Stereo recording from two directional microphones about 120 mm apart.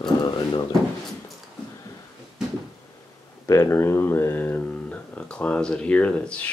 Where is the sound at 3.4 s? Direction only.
25° left (ahead or behind).